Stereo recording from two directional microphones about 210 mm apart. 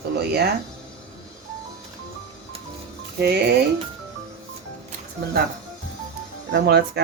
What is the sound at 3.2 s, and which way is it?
Speech, 50° right (ahead or behind).